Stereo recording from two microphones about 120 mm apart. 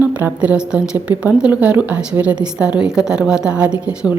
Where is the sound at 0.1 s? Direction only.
15° right (ahead or behind).